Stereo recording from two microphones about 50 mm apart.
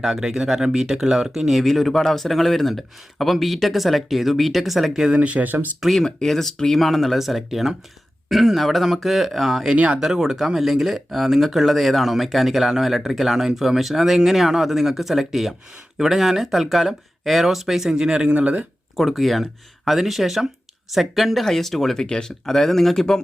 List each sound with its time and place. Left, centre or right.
0.0 s speech: centre
5.1 s speech: right
6.0 s speech: centre
9.7 s speech: right
10.0 s speech: centre; by 18.6 s right
18.9 s speech: centre